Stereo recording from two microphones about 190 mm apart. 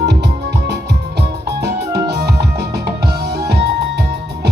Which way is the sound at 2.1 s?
60° right (ahead or behind).